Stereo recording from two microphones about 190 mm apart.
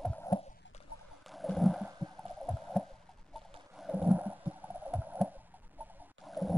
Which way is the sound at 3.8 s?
5° right (ahead or behind).